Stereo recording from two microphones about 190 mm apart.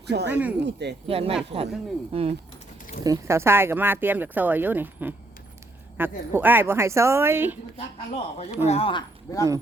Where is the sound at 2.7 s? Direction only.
45° left (ahead or behind).